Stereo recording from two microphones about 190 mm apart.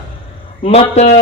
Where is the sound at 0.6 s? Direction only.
30° left (ahead or behind).